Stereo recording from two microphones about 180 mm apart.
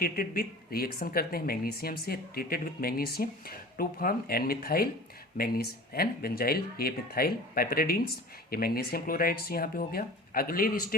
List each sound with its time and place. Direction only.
0.0 s speech: 55° left (ahead or behind)